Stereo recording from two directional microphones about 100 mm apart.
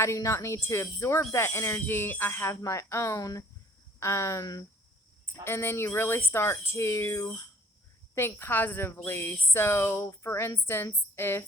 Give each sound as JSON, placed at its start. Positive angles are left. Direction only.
{"t": 0.0, "sound": "speech", "side_deg": 30}
{"t": 5.2, "sound": "speech", "side_deg": 20}